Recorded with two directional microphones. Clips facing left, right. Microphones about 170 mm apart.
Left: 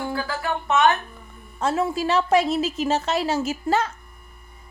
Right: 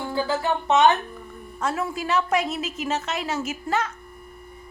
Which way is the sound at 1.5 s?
30° left (ahead or behind).